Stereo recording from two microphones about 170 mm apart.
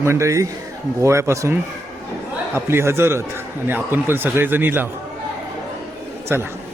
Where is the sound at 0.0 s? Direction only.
15° right (ahead or behind).